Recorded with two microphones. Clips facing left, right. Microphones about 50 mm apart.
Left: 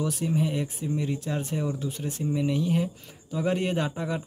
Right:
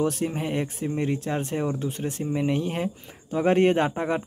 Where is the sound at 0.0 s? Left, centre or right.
Right.